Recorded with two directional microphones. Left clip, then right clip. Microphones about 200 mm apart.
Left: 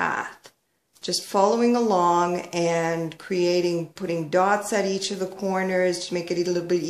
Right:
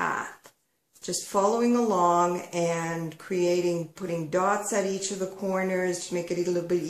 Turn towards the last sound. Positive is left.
turn(degrees=40)  # may be behind; listen again after turning